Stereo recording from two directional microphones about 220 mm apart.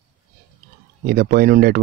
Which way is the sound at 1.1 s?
40° right (ahead or behind).